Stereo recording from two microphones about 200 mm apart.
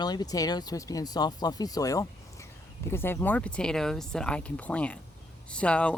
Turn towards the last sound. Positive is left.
turn(degrees=5)  # may be behind; listen again after turning